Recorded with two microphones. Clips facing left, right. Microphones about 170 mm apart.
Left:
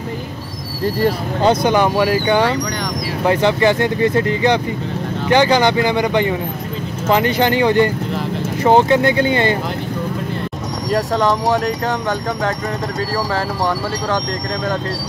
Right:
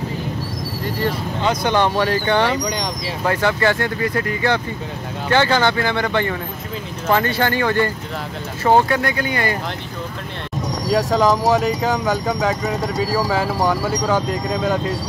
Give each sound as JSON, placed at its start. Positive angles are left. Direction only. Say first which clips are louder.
{"t": 1.6, "sound": "speech", "louder": "left 3 dB", "side_deg": 10}
{"t": 10.9, "sound": "speech", "louder": "even", "side_deg": -5}